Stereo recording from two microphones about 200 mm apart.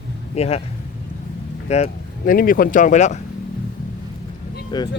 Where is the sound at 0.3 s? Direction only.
30° left (ahead or behind).